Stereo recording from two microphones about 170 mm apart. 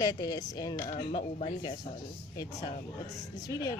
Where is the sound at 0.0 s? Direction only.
20° left (ahead or behind).